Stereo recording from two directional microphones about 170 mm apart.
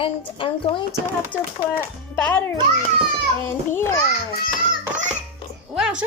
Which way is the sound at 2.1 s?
10° left (ahead or behind).